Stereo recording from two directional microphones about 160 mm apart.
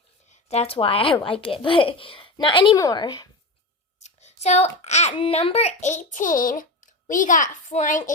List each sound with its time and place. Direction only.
0.3 s a woman's voice: 40° left (ahead or behind)
4.0 s a child's voice: 45° left (ahead or behind)